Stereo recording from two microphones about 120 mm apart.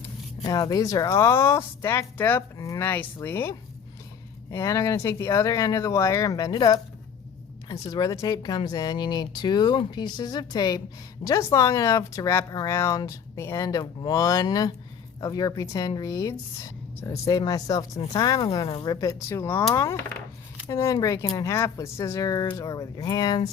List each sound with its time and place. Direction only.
0.4 s speech: 35° left (ahead or behind); by 3.5 s 20° left (ahead or behind)
4.5 s speech: 25° left (ahead or behind); by 18.9 s 45° left (ahead or behind)
18.9 s speech: 25° left (ahead or behind)